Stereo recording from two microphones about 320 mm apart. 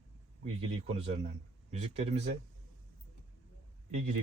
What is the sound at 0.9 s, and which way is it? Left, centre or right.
Speech, centre.